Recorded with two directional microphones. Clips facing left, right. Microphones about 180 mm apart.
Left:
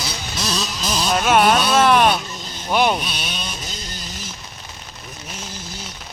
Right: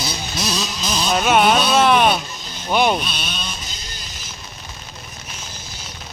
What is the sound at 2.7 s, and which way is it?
Speech, 5° left (ahead or behind).